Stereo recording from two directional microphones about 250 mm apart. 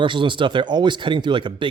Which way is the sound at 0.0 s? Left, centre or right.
Centre.